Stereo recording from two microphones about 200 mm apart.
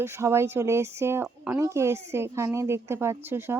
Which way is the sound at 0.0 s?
15° right (ahead or behind).